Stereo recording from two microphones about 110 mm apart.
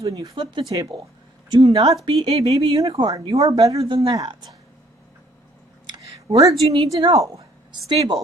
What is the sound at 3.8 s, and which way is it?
Speech, 50° right (ahead or behind).